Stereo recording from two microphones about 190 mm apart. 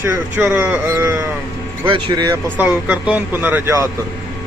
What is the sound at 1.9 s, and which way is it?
Speech, 25° right (ahead or behind).